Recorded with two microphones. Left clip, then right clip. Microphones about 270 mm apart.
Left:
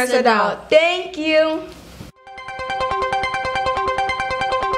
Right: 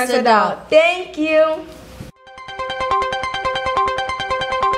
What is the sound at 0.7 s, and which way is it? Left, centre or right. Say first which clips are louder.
Speech: right 1 dB; left.